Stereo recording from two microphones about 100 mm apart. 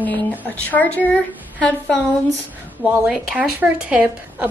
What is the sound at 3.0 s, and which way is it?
A woman's voice, 10° right (ahead or behind).